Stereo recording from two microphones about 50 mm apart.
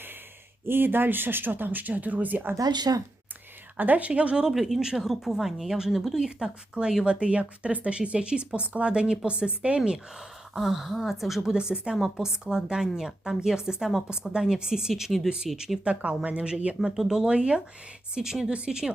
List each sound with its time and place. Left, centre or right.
0.7 s speech: right
3.8 s speech: right
4.5 s a woman's voice: centre
5.9 s speech: centre
6.1 s a woman's voice: centre
10.5 s a woman's voice: centre
11.9 s a woman's voice: centre
15.5 s speech: centre
15.8 s speech: right
16.9 s speech: centre
17.2 s a woman's voice: right